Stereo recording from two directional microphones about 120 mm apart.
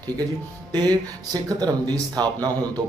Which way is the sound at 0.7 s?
35° right (ahead or behind).